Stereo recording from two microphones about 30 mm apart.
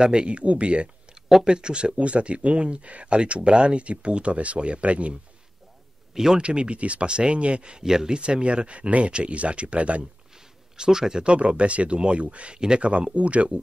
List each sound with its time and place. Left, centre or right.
0.0 s speech: right
0.3 s speech: right
1.4 s speech: right
2.0 s speech: right
6.1 s speech: centre
6.4 s speech: right
7.8 s speech: centre
8.1 s speech: right
10.3 s a sound: right
11.2 s speech: right
12.5 s speech: right
13.1 s speech: right